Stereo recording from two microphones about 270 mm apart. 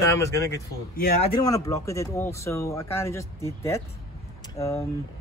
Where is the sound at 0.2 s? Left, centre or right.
Centre.